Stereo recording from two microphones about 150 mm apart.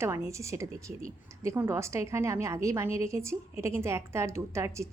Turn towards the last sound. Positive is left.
turn(degrees=-20)  # may be behind; listen again after turning